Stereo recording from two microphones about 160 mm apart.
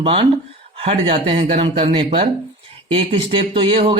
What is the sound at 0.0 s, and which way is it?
Speech, 35° right (ahead or behind).